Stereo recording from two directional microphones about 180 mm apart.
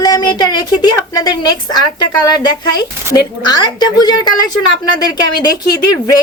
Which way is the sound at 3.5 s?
25° left (ahead or behind).